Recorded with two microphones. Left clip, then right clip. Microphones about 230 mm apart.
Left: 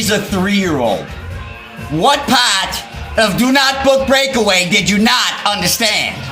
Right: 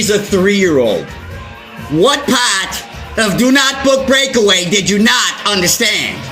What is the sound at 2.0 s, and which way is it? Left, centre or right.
A man's voice, centre.